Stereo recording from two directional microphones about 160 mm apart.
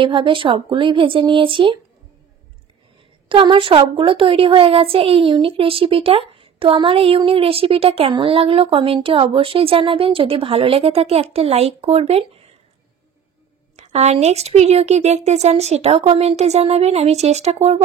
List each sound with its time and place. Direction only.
0.0 s a woman's voice: 30° right (ahead or behind)
3.3 s a woman's voice: 30° right (ahead or behind)
13.7 s speech: 45° right (ahead or behind)